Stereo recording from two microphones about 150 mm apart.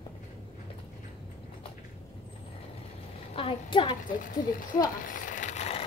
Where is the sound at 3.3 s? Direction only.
35° left (ahead or behind).